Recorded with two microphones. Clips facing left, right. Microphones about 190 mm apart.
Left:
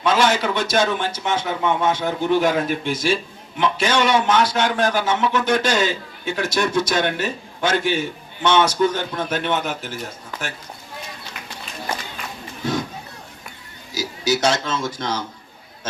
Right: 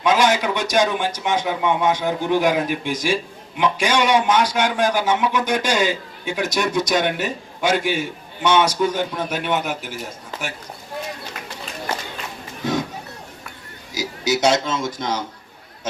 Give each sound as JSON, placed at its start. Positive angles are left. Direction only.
{"t": 0.0, "sound": "a man's voice", "side_deg": -15}
{"t": 13.9, "sound": "speech", "side_deg": -20}